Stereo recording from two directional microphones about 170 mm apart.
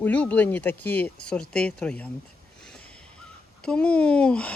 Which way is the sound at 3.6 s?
5° left (ahead or behind).